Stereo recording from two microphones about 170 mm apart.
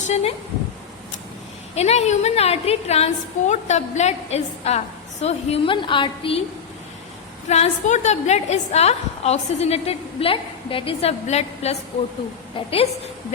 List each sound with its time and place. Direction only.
0.0 s a woman's voice: 40° left (ahead or behind)
1.7 s a woman's voice: 40° left (ahead or behind)
7.4 s a woman's voice: 40° left (ahead or behind)